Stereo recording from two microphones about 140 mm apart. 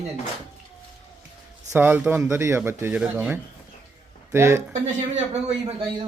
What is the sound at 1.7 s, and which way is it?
Speech, 15° right (ahead or behind).